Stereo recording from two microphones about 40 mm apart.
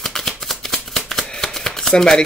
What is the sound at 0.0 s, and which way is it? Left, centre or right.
Shuffling cards, centre.